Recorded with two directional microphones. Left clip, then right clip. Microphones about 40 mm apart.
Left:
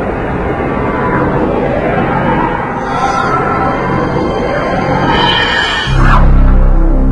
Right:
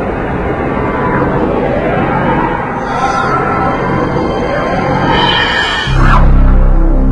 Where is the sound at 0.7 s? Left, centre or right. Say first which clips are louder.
Even; right.